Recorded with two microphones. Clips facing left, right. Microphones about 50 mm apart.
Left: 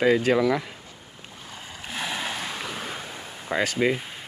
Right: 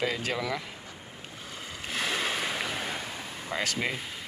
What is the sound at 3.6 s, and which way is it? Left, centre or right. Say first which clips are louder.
Speech: left 8 dB; centre.